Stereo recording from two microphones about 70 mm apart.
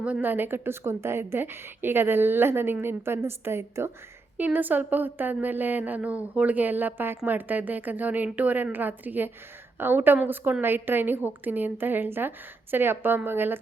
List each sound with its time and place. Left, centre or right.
0.0 s a woman's voice: right
4.4 s a woman's voice: right